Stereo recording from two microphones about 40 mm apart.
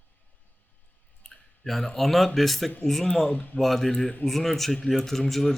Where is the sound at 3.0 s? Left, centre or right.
Centre.